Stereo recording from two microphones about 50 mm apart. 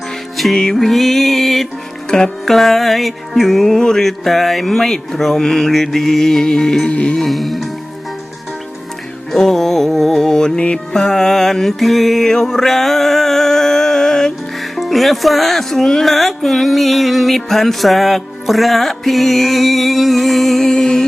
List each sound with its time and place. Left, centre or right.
0.3 s music: centre
2.0 s music: centre
2.5 s music: centre
6.9 s music: left
7.2 s speech: centre
9.3 s music: centre
14.8 s speech: centre